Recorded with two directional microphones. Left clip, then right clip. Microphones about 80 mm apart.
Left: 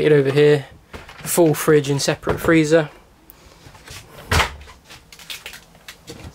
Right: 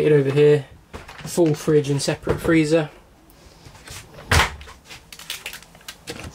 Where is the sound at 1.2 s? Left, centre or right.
Left.